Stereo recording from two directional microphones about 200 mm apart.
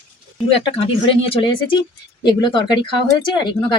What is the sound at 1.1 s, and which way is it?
Speech, 25° left (ahead or behind).